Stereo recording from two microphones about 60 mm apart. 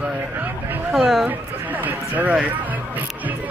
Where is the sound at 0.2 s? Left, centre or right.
Right.